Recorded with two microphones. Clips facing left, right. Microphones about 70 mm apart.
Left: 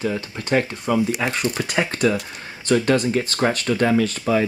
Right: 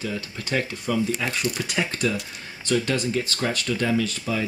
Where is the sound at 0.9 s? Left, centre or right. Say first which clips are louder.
Left 4 dB; left.